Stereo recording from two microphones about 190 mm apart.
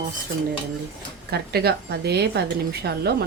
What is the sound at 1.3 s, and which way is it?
Speech, 55° right (ahead or behind).